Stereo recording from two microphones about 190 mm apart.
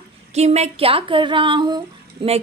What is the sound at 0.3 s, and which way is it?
A woman's voice, 35° right (ahead or behind).